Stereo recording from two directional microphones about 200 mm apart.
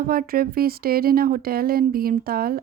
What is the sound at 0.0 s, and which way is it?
Speech, 45° right (ahead or behind).